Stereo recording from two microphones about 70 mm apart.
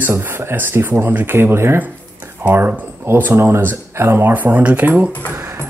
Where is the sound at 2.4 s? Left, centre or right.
Right.